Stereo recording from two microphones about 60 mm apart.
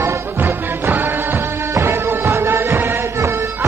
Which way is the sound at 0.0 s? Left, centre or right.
Right.